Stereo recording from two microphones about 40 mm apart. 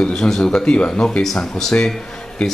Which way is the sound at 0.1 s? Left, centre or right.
Centre.